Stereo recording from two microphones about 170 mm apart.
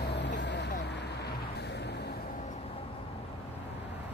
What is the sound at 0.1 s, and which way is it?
Vehicle, 90° left.